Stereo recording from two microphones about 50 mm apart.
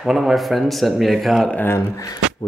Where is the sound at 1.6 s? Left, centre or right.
Left.